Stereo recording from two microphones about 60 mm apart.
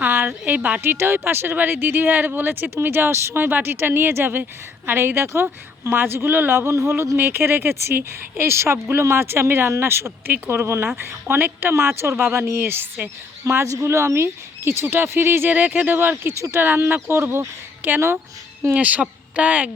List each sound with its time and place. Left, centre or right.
0.0 s a sound: right
0.8 s speech: right
7.2 s speech: right
13.7 s speech: right
16.3 s speech: right
16.6 s speech: right
18.7 s speech: right